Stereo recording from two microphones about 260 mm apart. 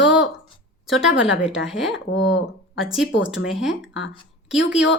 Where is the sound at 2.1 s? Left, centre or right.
Left.